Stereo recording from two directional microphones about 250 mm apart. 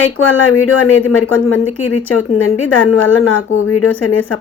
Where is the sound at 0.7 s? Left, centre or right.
Left.